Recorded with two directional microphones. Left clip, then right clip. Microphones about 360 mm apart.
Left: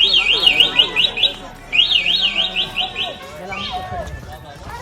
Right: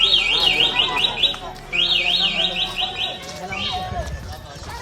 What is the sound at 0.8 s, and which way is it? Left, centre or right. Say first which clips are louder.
Alarm: left 4 dB; left.